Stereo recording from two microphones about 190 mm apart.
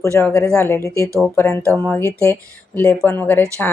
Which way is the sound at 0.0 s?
15° left (ahead or behind).